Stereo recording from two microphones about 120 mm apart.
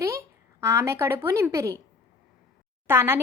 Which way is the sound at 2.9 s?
20° right (ahead or behind).